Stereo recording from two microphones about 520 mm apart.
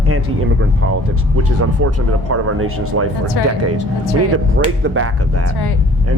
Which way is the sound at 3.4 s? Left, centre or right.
Left.